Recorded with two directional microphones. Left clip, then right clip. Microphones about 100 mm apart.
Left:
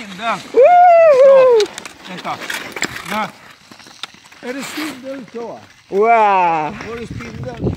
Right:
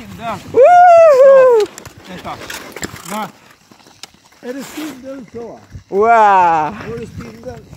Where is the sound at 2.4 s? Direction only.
30° left (ahead or behind).